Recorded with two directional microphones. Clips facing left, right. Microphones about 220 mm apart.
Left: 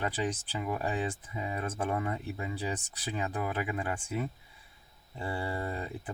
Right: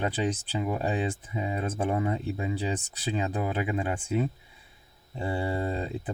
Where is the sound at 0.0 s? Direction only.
20° right (ahead or behind).